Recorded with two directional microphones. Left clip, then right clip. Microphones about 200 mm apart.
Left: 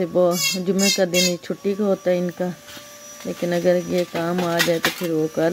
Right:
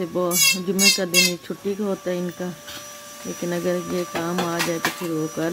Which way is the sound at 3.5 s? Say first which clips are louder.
Left 6 dB; 10° left (ahead or behind).